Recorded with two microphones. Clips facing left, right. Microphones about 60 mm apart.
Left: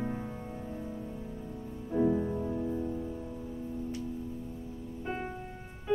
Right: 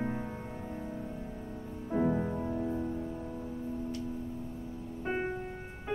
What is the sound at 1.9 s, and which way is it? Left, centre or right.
Music, right.